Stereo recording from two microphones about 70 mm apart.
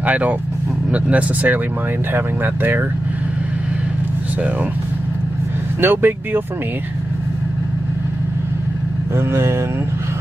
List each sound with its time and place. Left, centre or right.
0.0 s speech: right
5.8 s speech: right
9.1 s speech: right